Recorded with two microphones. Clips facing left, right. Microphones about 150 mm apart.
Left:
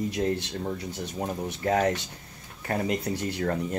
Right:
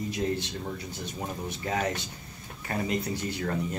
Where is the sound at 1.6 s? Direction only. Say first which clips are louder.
Left 6 dB; 45° left (ahead or behind).